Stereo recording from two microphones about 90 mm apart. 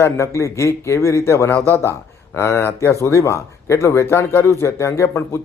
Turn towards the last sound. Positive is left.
turn(degrees=30)  # may be behind; listen again after turning